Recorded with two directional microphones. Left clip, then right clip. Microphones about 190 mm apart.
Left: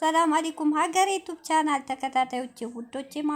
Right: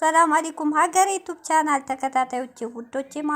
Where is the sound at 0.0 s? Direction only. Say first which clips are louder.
Right 5 dB; 20° right (ahead or behind).